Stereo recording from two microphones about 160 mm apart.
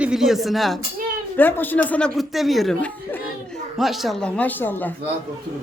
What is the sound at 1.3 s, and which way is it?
Speech, 10° left (ahead or behind).